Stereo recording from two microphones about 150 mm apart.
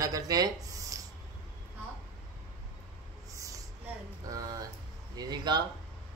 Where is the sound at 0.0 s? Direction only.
25° right (ahead or behind).